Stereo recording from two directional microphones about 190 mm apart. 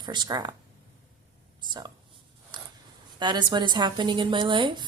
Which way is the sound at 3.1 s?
25° right (ahead or behind).